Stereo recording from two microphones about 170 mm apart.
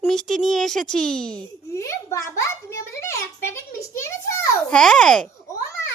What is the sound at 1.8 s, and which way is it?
Speech, 15° left (ahead or behind).